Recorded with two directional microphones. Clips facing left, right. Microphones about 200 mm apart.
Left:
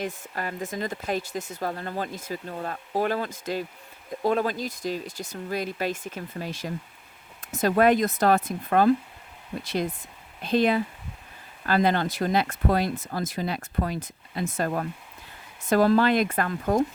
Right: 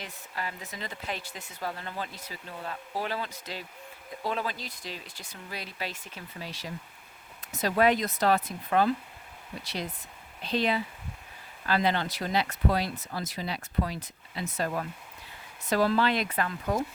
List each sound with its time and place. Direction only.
0.0 s speech: 50° left (ahead or behind)